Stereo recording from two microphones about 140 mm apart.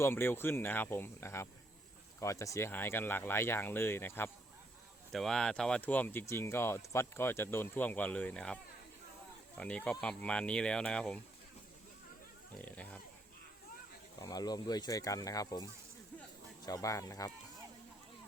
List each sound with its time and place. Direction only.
0.0 s speech: 15° left (ahead or behind)
5.1 s speech: 5° left (ahead or behind)
9.6 s speech: 10° left (ahead or behind)
12.6 s pig: 10° left (ahead or behind)
14.2 s speech: 25° left (ahead or behind)